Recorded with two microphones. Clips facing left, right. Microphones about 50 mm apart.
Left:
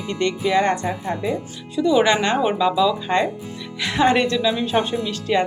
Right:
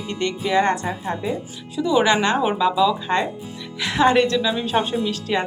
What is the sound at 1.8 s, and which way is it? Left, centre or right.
Speech, centre.